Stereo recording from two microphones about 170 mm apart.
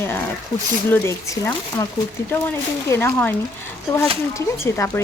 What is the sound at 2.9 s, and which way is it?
Speech, 15° left (ahead or behind).